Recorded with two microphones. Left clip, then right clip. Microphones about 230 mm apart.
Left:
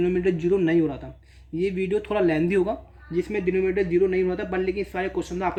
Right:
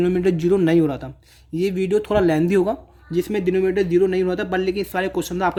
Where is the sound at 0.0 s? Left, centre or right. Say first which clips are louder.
Right 4 dB; right.